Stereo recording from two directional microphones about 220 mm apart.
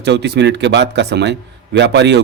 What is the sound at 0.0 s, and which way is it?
A man's voice, 50° right (ahead or behind).